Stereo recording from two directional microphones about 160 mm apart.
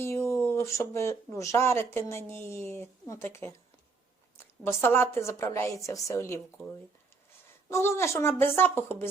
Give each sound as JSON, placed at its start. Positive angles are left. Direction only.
{"t": 0.0, "sound": "a woman's voice", "side_deg": 15}
{"t": 7.7, "sound": "a woman's voice", "side_deg": 15}